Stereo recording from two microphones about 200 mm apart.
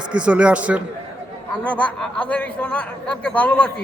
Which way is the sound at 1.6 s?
5° left (ahead or behind).